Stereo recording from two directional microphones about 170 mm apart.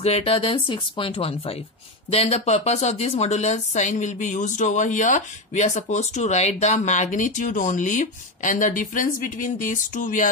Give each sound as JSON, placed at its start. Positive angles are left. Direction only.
{"t": 0.0, "sound": "speech", "side_deg": 35}